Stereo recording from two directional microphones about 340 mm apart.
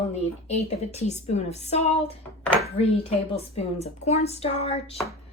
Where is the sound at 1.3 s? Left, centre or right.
Centre.